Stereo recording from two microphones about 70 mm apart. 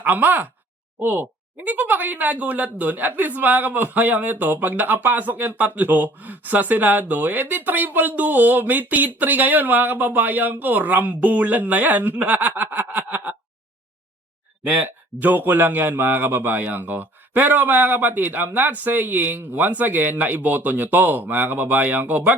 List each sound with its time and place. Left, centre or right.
0.0 s speech: right
14.8 s speech: right